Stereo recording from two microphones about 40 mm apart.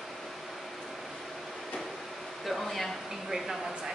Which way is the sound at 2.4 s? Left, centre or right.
Centre.